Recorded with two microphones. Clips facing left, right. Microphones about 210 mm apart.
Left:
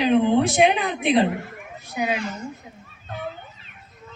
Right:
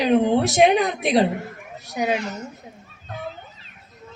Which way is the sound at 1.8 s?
40° right (ahead or behind).